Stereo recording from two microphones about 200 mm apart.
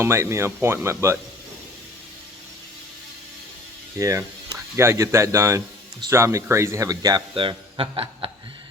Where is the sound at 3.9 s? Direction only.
15° right (ahead or behind).